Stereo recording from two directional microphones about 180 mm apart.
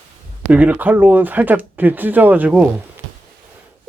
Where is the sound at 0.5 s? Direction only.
10° right (ahead or behind).